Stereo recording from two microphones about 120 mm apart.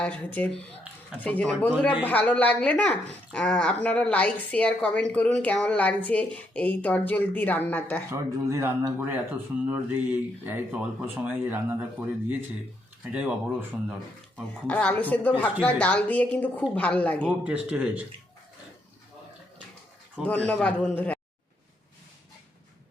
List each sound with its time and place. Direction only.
0.0 s speech: 15° left (ahead or behind)
8.1 s speech: 25° right (ahead or behind)
14.3 s speech: 10° left (ahead or behind)
17.2 s speech: 10° right (ahead or behind)
20.2 s speech: 10° left (ahead or behind)